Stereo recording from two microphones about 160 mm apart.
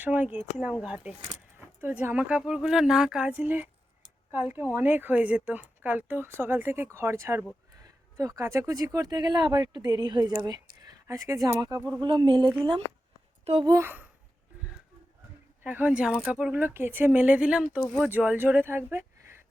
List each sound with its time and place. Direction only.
0.0 s speech: 10° right (ahead or behind); by 13.7 s 35° right (ahead or behind)
13.7 s speech: 15° right (ahead or behind)
15.6 s speech: 10° right (ahead or behind)